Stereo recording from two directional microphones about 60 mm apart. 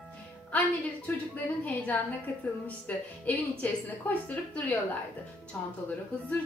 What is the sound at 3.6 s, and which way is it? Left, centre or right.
A woman's voice, left.